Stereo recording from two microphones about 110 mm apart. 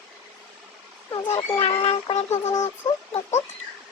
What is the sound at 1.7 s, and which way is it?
Speech, 50° left (ahead or behind).